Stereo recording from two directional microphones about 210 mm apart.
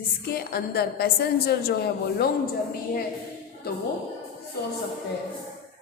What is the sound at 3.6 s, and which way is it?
Speech, 45° left (ahead or behind).